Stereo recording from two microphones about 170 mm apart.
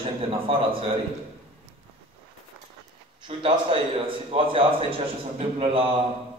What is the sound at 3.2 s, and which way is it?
A man's voice, 30° right (ahead or behind).